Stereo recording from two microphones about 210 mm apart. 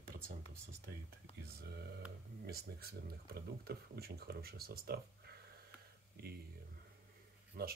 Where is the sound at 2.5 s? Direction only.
50° right (ahead or behind).